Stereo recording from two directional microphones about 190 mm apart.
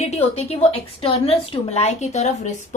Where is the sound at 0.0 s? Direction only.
35° left (ahead or behind).